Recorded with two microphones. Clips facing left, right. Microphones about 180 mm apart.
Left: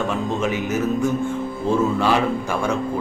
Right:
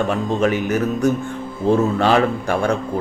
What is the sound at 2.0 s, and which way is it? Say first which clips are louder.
Speech: right 3 dB; 60° right (ahead or behind).